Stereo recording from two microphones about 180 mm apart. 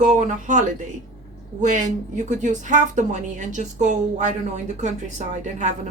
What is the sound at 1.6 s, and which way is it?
A woman's voice, 45° right (ahead or behind).